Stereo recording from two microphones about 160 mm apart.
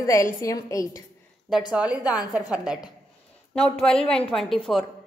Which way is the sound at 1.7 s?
5° right (ahead or behind).